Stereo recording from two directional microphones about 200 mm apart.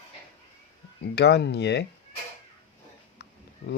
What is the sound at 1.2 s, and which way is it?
Speech, 55° left (ahead or behind).